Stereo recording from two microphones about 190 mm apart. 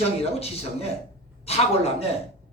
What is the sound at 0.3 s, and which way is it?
A woman's voice, 30° left (ahead or behind).